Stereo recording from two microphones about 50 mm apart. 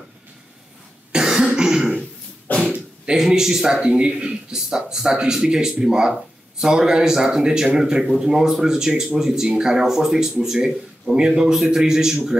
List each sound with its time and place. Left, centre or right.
1.1 s throat clearing: centre
2.5 s throat clearing: left
3.1 s speech: centre